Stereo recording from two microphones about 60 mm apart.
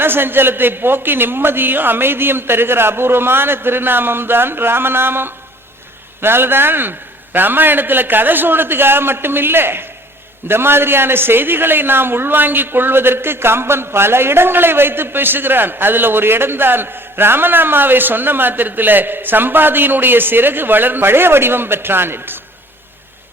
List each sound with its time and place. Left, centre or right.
0.0 s a man's voice: right